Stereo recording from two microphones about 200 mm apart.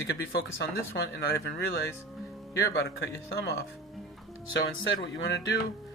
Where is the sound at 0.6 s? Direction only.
55° left (ahead or behind).